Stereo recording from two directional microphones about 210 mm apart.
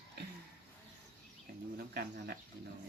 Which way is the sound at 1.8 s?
45° right (ahead or behind).